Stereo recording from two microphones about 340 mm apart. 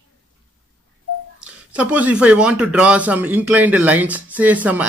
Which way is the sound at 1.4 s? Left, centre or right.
Centre.